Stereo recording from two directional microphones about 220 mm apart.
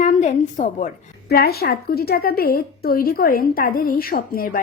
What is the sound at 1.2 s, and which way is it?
A woman's voice, 45° left (ahead or behind).